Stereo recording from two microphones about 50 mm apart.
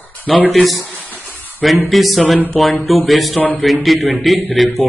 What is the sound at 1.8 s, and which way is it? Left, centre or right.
A man's voice, centre.